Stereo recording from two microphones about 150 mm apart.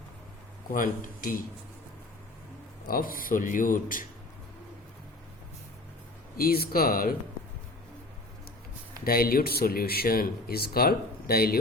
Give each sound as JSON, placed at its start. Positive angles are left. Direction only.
{"t": 0.7, "sound": "speech", "side_deg": 65}
{"t": 2.8, "sound": "speech", "side_deg": 75}
{"t": 6.3, "sound": "speech", "side_deg": 85}
{"t": 9.0, "sound": "speech", "side_deg": 80}